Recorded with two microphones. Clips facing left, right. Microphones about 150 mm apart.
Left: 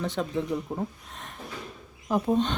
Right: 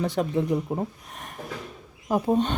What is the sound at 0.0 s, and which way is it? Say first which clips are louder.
Speech: right 4 dB; 10° right (ahead or behind).